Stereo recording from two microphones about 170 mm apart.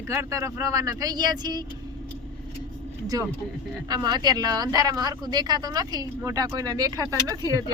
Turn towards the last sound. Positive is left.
turn(degrees=-20)  # may be behind; listen again after turning